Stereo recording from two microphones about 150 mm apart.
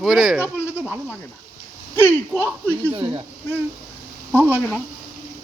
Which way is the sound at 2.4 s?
10° left (ahead or behind).